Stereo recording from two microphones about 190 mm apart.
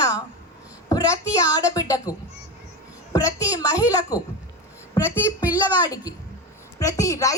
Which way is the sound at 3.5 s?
15° left (ahead or behind).